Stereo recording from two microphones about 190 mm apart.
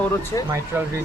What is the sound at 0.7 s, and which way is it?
Speech, 10° right (ahead or behind).